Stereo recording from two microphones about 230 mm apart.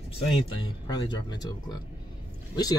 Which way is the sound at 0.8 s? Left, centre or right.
Centre.